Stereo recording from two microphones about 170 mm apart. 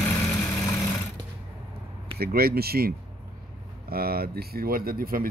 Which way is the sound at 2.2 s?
65° right (ahead or behind).